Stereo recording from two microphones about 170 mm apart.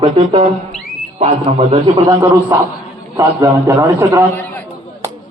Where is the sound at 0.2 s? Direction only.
40° right (ahead or behind).